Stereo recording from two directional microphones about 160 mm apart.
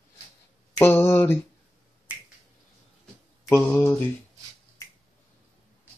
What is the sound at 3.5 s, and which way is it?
Speech, 15° left (ahead or behind).